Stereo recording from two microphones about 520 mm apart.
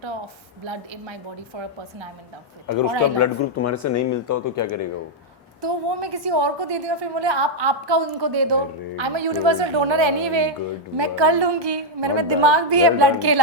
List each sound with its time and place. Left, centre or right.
0.6 s a woman's voice: right
2.6 s speech: left
5.6 s a woman's voice: right